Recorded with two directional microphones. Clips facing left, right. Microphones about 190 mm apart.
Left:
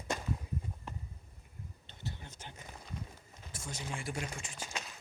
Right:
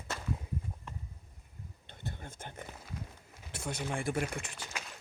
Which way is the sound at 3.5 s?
60° right (ahead or behind).